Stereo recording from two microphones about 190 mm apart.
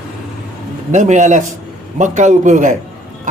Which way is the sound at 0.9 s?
40° right (ahead or behind).